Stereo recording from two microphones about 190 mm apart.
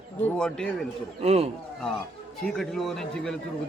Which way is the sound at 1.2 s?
35° right (ahead or behind).